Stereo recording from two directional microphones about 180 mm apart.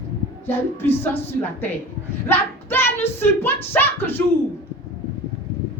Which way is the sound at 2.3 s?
10° left (ahead or behind).